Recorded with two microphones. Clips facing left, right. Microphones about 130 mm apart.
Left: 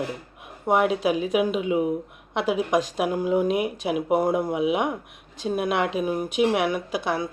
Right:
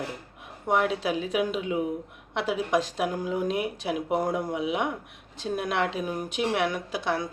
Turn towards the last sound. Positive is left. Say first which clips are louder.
# left 3 dB
turn(degrees=10)  # may be behind; listen again after turning